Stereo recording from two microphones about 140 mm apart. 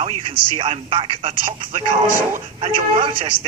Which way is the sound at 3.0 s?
40° right (ahead or behind).